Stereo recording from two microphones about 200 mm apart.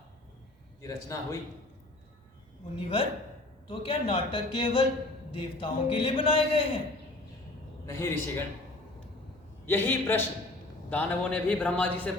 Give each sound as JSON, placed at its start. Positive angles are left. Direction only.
{"t": 0.8, "sound": "a man's voice", "side_deg": 15}
{"t": 2.7, "sound": "a man's voice", "side_deg": 25}
{"t": 7.9, "sound": "a man's voice", "side_deg": 15}
{"t": 9.6, "sound": "a man's voice", "side_deg": 10}